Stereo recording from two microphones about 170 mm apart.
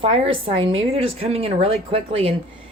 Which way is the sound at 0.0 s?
35° right (ahead or behind).